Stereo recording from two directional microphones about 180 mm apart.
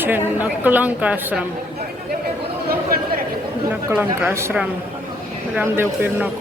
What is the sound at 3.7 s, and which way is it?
Speech, 5° right (ahead or behind).